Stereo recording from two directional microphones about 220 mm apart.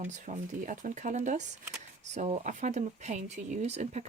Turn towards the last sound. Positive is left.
turn(degrees=-30)  # may be behind; listen again after turning